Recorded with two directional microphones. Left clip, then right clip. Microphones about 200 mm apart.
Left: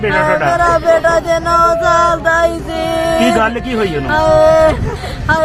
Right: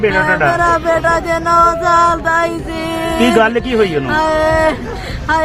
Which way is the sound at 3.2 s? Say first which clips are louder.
Right 1 dB; 30° right (ahead or behind).